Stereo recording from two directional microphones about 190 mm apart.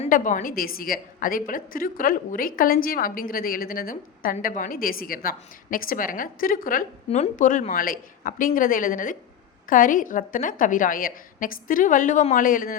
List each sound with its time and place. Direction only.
0.0 s a woman's voice: 40° left (ahead or behind)